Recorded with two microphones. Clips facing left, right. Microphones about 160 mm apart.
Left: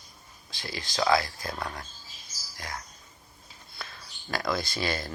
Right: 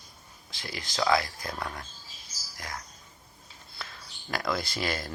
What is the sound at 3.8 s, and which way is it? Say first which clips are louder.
Speech: even; 25° left (ahead or behind).